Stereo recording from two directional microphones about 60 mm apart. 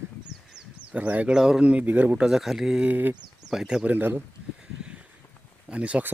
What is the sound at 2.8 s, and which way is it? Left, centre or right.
Speech, right.